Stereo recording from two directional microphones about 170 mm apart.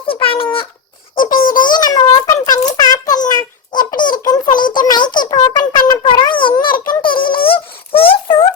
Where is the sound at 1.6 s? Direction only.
25° left (ahead or behind).